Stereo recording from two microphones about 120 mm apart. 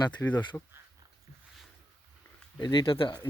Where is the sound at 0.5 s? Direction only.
20° left (ahead or behind).